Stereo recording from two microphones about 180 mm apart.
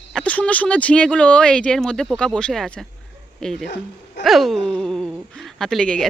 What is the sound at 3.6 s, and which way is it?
Speech, 70° left (ahead or behind).